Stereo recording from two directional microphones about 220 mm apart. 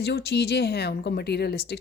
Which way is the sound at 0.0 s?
50° left (ahead or behind).